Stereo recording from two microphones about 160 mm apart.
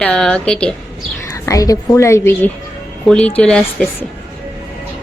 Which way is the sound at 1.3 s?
20° left (ahead or behind).